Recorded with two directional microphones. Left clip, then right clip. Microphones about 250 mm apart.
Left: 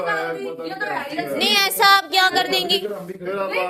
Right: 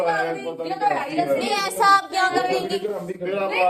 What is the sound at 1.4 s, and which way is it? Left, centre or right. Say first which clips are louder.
A woman's voice: left 4 dB; left.